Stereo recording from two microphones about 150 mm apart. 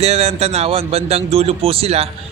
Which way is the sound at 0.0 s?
45° right (ahead or behind).